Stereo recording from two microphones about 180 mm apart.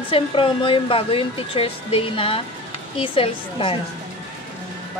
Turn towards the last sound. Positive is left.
turn(degrees=30)  # may be behind; listen again after turning